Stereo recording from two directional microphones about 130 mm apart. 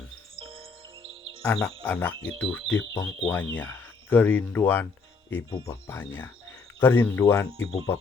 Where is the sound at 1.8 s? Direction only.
15° left (ahead or behind).